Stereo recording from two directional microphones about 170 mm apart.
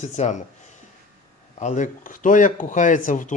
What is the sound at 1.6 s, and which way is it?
Speech, 45° left (ahead or behind).